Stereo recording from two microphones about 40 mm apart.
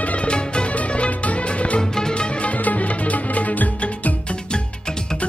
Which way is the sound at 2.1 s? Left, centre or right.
Left.